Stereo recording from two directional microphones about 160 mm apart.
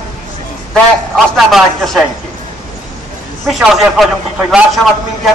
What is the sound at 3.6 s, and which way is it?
A man's voice, centre (ahead or behind).